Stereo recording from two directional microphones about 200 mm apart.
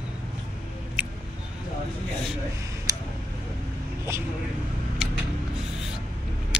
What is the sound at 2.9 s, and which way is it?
Tick, 15° right (ahead or behind).